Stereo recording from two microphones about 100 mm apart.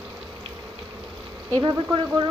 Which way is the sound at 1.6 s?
50° right (ahead or behind).